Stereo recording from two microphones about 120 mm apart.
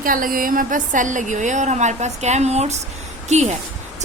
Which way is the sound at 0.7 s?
90° right.